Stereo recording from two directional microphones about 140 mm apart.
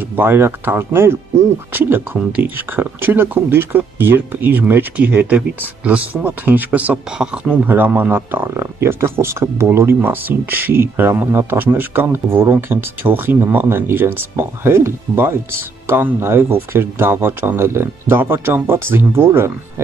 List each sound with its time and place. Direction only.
0.1 s speech: 15° right (ahead or behind)